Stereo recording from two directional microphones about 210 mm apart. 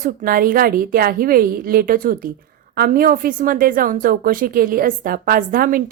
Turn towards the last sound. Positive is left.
turn(degrees=-45)  # may be behind; listen again after turning